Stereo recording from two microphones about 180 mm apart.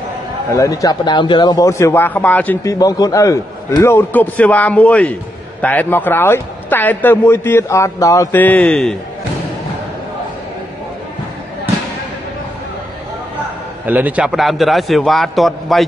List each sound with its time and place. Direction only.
0.5 s a man's voice: 15° left (ahead or behind)
2.8 s a man's voice: 20° left (ahead or behind)
13.8 s a man's voice: 10° right (ahead or behind)